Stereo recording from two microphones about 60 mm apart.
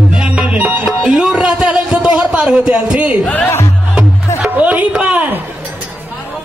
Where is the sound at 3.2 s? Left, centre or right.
Left.